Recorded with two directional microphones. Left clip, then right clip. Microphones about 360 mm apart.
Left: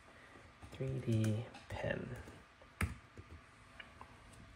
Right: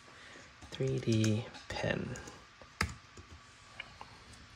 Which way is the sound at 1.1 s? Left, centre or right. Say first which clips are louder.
Right 7 dB; centre.